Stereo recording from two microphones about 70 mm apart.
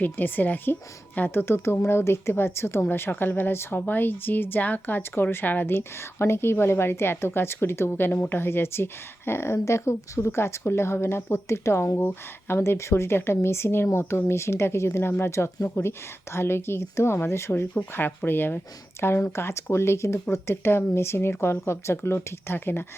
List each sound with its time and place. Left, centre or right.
0.0 s speech: left